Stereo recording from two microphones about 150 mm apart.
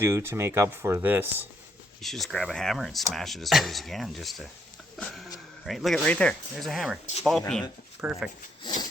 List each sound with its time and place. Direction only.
0.0 s speech: 15° right (ahead or behind)
2.0 s speech: centre (ahead or behind)
4.9 s a sound: centre (ahead or behind)
5.6 s speech: centre (ahead or behind)
8.0 s speech: 10° right (ahead or behind)
8.6 s wood: 30° left (ahead or behind)